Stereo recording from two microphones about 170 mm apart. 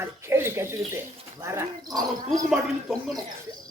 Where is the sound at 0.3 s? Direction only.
15° right (ahead or behind).